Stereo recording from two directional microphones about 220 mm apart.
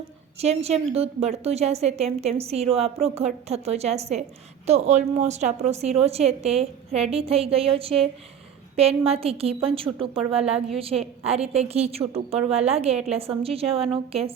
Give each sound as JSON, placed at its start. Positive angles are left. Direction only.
{"t": 0.4, "sound": "a woman's voice", "side_deg": -30}